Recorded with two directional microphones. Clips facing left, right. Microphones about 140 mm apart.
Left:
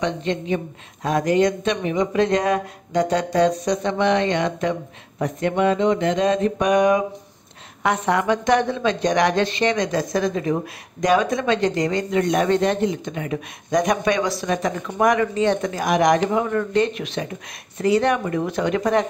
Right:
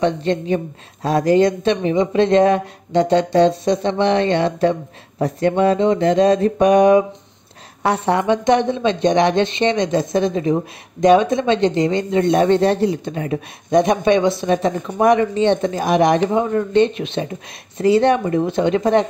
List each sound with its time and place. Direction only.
0.0 s mantra: 35° right (ahead or behind)
1.0 s a woman's voice: 30° right (ahead or behind)
5.2 s mantra: 35° right (ahead or behind)
7.8 s a woman's voice: 30° right (ahead or behind)